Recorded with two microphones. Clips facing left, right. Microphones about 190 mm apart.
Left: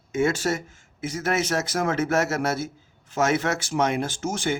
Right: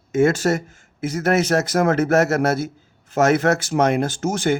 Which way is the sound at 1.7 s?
65° right (ahead or behind).